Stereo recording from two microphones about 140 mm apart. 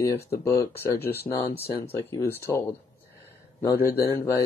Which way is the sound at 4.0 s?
25° left (ahead or behind).